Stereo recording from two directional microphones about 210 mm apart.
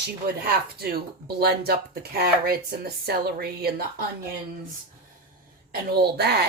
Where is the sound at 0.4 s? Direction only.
45° right (ahead or behind).